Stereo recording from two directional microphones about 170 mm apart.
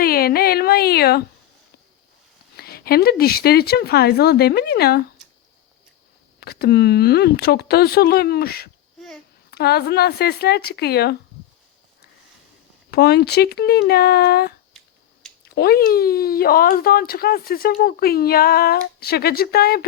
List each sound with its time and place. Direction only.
0.0 s a sound: 60° left (ahead or behind)
2.6 s speech: 65° left (ahead or behind)
6.4 s speech: 65° left (ahead or behind)
12.9 s speech: 70° left (ahead or behind)